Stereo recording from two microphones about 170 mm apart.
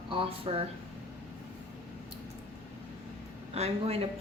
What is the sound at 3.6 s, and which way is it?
Speech, 35° right (ahead or behind).